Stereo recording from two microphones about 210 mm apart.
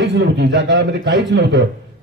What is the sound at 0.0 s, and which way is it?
A man's voice, 55° right (ahead or behind).